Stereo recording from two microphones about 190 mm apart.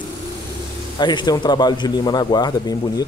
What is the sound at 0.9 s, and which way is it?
Speech, 20° left (ahead or behind).